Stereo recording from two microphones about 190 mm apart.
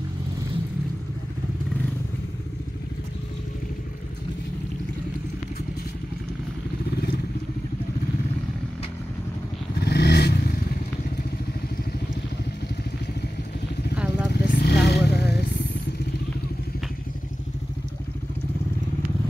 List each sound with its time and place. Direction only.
9.8 s vehicle: 60° left (ahead or behind)
13.9 s vehicle: 5° right (ahead or behind)
14.3 s vehicle: 60° left (ahead or behind)